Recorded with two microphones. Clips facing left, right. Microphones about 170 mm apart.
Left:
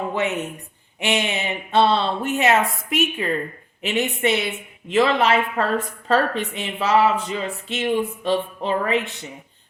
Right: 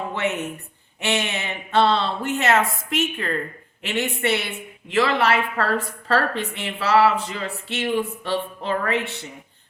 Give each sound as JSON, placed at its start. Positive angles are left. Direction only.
{"t": 0.1, "sound": "a woman's voice", "side_deg": 15}